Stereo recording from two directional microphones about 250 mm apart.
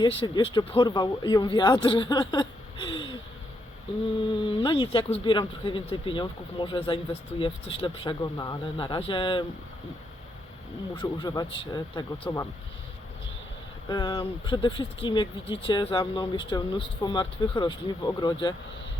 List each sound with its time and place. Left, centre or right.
0.0 s speech: centre
4.4 s speech: centre
10.9 s speech: centre
13.8 s speech: centre